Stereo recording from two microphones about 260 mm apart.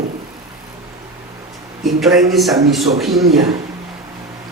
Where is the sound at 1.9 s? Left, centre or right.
Centre.